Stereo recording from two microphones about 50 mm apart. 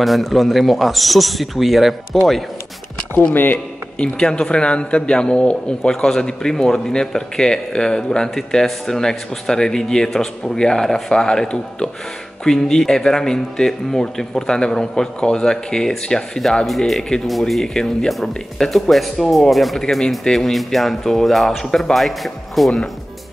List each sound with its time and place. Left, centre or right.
0.0 s speech: centre
3.5 s speech: centre